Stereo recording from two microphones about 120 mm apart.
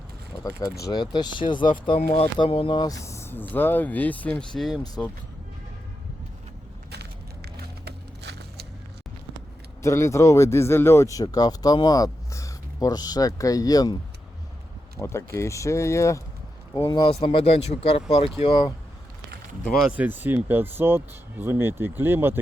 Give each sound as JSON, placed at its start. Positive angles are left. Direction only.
{"t": 0.6, "sound": "speech", "side_deg": 35}
{"t": 2.0, "sound": "speech", "side_deg": 55}
{"t": 9.8, "sound": "speech", "side_deg": 25}
{"t": 14.9, "sound": "speech", "side_deg": 20}
{"t": 17.1, "sound": "speech", "side_deg": 55}
{"t": 19.9, "sound": "speech", "side_deg": -15}